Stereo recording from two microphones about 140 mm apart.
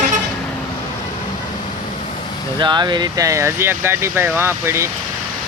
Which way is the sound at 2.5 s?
30° right (ahead or behind).